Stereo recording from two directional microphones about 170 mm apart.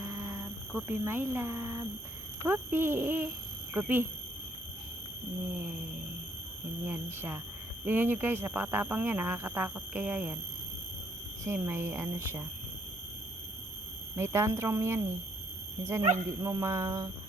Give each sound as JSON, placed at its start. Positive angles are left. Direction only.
{"t": 0.0, "sound": "a sound", "side_deg": -20}
{"t": 0.7, "sound": "speech", "side_deg": -10}
{"t": 6.8, "sound": "speech", "side_deg": -10}
{"t": 11.4, "sound": "speech", "side_deg": -15}
{"t": 14.2, "sound": "speech", "side_deg": -15}